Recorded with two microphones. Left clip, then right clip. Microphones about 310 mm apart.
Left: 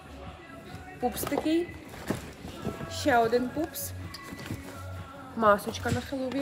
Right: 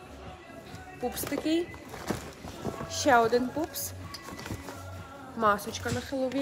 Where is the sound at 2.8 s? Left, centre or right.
Centre.